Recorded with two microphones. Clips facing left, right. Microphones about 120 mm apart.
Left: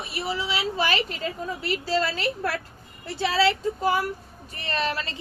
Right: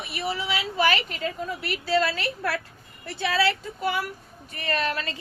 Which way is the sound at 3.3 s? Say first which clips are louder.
Left 2 dB; 25° left (ahead or behind).